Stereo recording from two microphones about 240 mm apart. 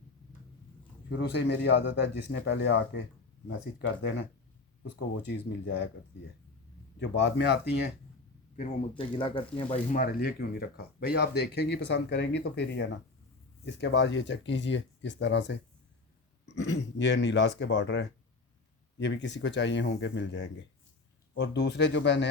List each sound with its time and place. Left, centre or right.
1.2 s a man's voice: left
4.8 s a man's voice: left
7.0 s a man's voice: left
8.5 s a man's voice: left
16.6 s a man's voice: left